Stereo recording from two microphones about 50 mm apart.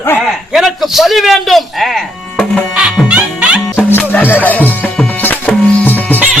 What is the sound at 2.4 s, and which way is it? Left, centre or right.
Music, centre.